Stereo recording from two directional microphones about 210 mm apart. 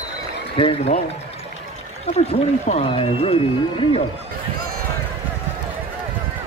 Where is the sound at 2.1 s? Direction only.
30° left (ahead or behind).